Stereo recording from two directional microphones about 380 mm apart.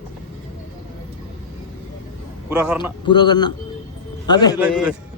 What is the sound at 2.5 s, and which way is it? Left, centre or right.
Speech, centre.